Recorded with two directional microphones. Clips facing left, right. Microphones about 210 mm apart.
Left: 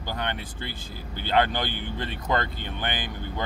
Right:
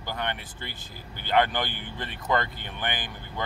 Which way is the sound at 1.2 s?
15° right (ahead or behind).